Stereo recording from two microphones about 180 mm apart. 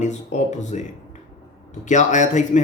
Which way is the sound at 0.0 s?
40° left (ahead or behind).